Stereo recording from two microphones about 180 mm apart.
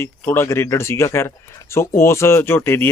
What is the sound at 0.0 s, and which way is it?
Speech, 15° left (ahead or behind).